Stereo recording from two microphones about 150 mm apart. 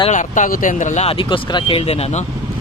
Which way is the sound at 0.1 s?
55° left (ahead or behind).